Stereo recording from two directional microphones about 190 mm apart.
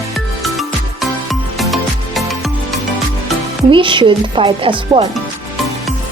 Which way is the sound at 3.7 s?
25° right (ahead or behind).